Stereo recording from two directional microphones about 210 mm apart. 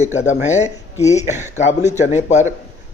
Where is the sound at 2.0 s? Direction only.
35° left (ahead or behind).